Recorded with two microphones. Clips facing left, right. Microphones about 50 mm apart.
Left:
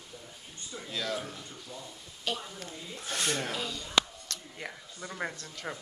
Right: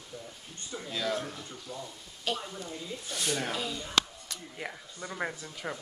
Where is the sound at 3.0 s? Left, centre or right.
Left.